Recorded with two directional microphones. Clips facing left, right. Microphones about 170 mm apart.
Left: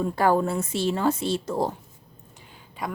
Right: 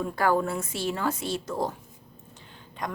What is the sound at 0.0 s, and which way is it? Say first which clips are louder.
A woman's voice: left 3 dB; 30° left (ahead or behind).